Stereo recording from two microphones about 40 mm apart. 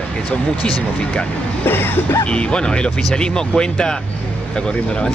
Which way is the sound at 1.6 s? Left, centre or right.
Left.